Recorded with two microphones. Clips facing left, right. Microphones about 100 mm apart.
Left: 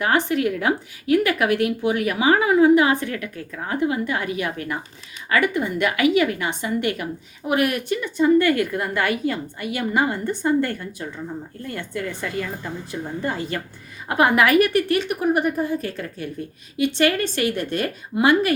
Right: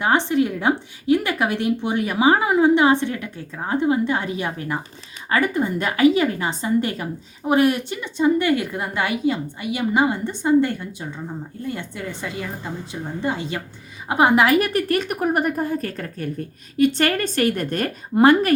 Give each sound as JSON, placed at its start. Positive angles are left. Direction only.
{"t": 0.0, "sound": "a woman's voice", "side_deg": -25}